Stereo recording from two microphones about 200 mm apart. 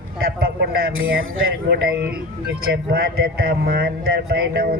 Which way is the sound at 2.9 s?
50° right (ahead or behind).